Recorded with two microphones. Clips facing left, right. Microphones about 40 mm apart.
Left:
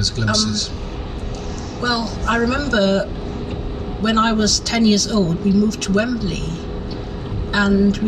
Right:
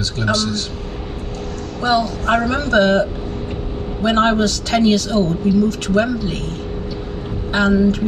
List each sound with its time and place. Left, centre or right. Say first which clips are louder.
0.2 s speech: right 1 dB; right
1.8 s speech: right 4 dB; right
7.5 s speech: right 1 dB; right